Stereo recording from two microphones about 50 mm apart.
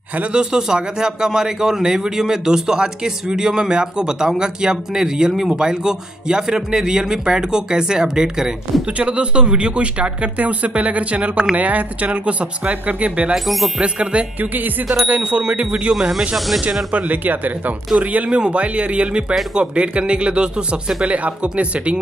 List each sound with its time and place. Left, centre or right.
0.2 s a man's voice: centre
13.3 s speech: centre
13.7 s speech: right
14.4 s speech: right
15.9 s a man's voice: centre
16.9 s speech: right